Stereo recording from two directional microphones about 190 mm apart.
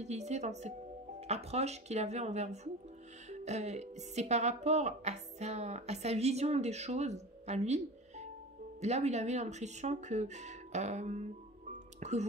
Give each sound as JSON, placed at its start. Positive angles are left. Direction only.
{"t": 0.0, "sound": "speech", "side_deg": -35}
{"t": 11.7, "sound": "music", "side_deg": -35}